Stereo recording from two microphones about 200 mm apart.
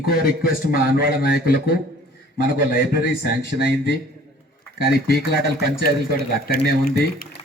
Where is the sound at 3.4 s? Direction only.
60° right (ahead or behind).